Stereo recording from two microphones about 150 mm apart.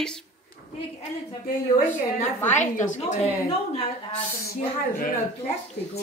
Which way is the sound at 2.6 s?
50° left (ahead or behind).